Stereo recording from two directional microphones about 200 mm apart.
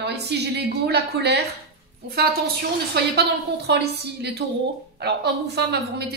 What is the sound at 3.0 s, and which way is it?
A woman's voice, 55° right (ahead or behind).